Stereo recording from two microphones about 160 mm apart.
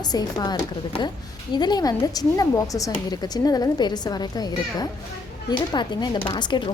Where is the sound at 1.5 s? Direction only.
25° left (ahead or behind).